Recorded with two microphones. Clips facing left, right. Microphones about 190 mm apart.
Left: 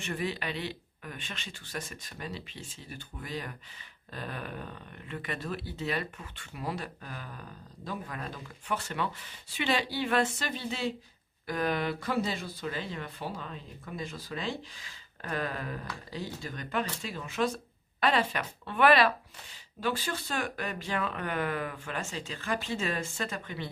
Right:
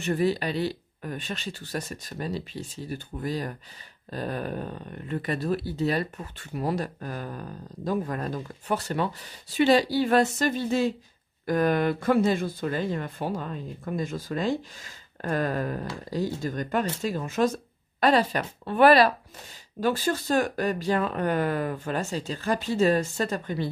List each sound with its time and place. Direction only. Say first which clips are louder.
0.0 s speech: right 9 dB; 40° right (ahead or behind)